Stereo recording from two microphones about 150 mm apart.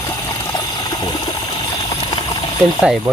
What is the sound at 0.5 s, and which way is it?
Stream, 25° left (ahead or behind).